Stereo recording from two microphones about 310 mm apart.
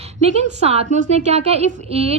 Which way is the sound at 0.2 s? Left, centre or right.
Right.